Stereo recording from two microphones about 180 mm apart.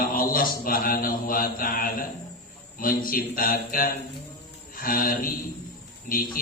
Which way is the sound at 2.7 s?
50° left (ahead or behind).